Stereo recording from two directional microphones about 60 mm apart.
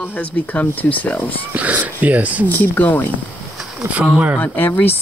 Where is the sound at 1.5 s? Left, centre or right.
Right.